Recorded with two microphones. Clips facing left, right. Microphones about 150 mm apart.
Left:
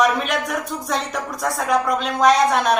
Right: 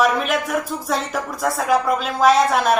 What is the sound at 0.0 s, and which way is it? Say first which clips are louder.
Speech: right 1 dB; centre (ahead or behind).